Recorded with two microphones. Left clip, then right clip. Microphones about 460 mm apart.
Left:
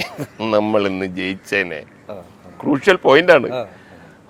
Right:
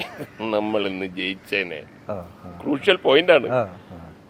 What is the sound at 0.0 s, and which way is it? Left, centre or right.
Speech, left.